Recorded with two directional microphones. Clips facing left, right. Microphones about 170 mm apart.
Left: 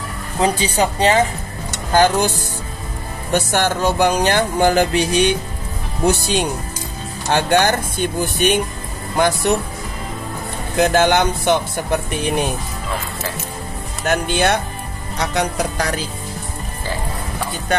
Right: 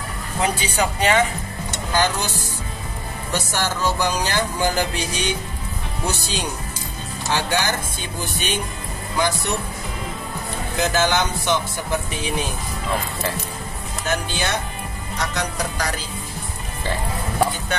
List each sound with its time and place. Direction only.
0.4 s speech: 30° left (ahead or behind)
1.9 s speech: 50° left (ahead or behind)
3.3 s music: 55° left (ahead or behind)
10.8 s music: 60° left (ahead or behind)
14.0 s music: 60° left (ahead or behind)